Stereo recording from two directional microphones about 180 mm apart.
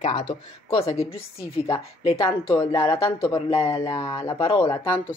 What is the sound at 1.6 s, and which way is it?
Speech, 30° left (ahead or behind).